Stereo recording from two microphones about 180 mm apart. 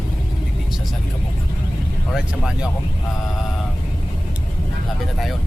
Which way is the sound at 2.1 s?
5° right (ahead or behind).